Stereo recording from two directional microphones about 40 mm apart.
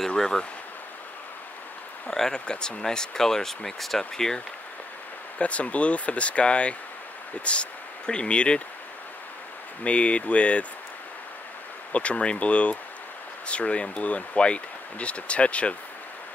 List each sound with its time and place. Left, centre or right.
2.0 s speech: centre
5.4 s speech: left
9.8 s speech: left
11.9 s speech: left